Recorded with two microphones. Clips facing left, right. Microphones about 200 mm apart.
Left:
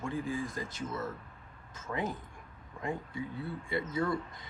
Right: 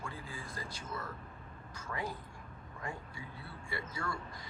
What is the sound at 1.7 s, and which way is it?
Speech, 20° left (ahead or behind).